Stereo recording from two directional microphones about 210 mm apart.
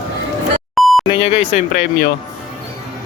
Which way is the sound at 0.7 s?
Centre (ahead or behind).